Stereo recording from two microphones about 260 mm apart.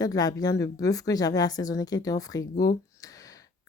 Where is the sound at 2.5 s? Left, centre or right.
Left.